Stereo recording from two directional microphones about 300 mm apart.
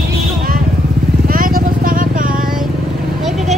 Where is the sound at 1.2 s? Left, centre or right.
Right.